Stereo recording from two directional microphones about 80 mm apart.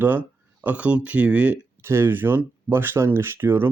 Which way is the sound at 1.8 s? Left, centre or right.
Right.